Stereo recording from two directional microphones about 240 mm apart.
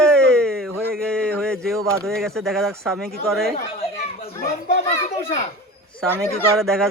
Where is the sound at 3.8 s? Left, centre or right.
Left.